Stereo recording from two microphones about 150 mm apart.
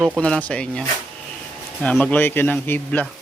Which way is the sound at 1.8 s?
10° left (ahead or behind).